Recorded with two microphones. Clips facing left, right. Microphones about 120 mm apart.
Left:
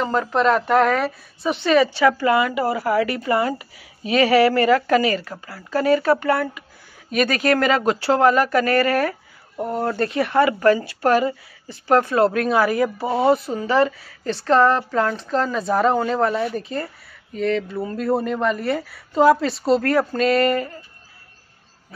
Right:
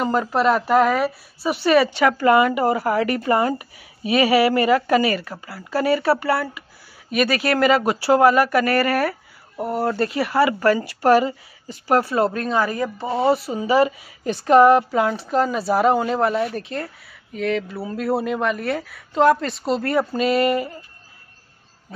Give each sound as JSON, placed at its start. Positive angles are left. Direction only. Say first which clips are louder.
{"t": 0.0, "sound": "a woman's voice", "louder": "even", "side_deg": -10}
{"t": 2.3, "sound": "speech", "louder": "right 3 dB", "side_deg": -40}
{"t": 4.1, "sound": "a woman's voice", "louder": "left 1 dB", "side_deg": -15}
{"t": 9.6, "sound": "a woman's voice", "louder": "right 1 dB", "side_deg": -5}
{"t": 12.4, "sound": "a woman's voice", "louder": "left 3 dB", "side_deg": 10}